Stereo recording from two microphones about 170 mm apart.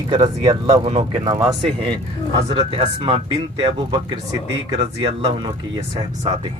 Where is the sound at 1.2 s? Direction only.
20° right (ahead or behind).